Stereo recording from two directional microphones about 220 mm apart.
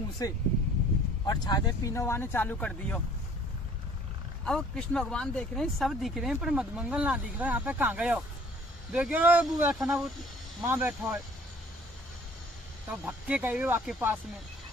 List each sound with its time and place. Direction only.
0.2 s speech: 15° left (ahead or behind)
4.4 s speech: 5° left (ahead or behind)
13.1 s speech: 5° right (ahead or behind)